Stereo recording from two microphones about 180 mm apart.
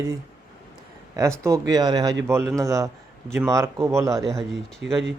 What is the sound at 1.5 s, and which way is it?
A man's voice, 20° right (ahead or behind).